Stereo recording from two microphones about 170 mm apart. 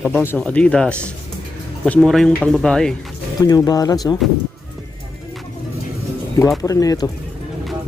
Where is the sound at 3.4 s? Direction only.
25° left (ahead or behind).